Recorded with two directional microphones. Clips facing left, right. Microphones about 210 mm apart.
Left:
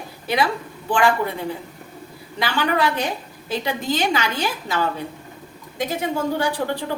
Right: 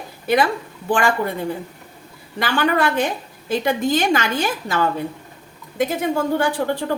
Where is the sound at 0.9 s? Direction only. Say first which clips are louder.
Even; 45° right (ahead or behind).